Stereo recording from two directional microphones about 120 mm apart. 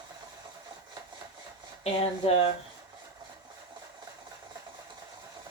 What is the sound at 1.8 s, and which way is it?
Speech, 60° left (ahead or behind).